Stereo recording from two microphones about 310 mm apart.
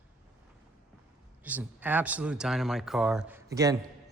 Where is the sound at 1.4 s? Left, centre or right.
Centre.